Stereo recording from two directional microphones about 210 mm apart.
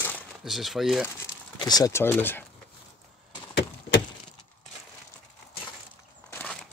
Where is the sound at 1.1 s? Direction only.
20° left (ahead or behind).